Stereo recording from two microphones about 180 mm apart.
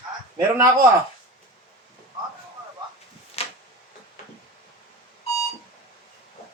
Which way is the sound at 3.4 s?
35° left (ahead or behind).